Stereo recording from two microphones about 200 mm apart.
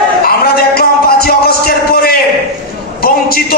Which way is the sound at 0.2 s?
50° left (ahead or behind).